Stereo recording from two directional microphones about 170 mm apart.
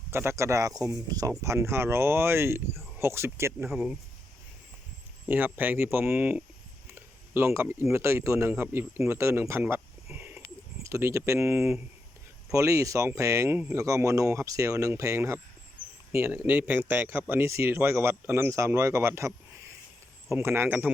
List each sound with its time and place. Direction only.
0.1 s speech: 15° right (ahead or behind)
3.7 s speech: centre (ahead or behind)
5.3 s speech: 10° right (ahead or behind)
20.3 s speech: 15° right (ahead or behind)